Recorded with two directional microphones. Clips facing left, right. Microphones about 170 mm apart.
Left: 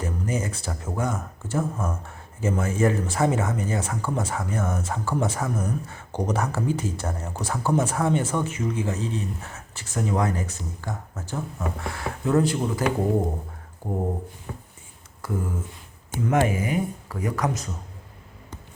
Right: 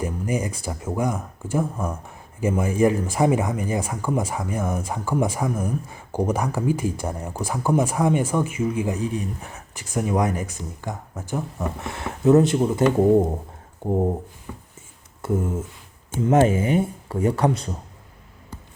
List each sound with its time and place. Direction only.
0.0 s speech: 15° right (ahead or behind)
15.2 s a sound: 25° right (ahead or behind)
16.2 s speech: 25° right (ahead or behind)